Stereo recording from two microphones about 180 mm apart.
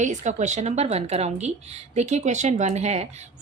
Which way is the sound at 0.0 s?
40° right (ahead or behind).